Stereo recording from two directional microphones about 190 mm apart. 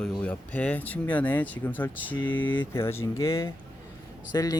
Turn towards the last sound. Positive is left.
turn(degrees=20)  # may be behind; listen again after turning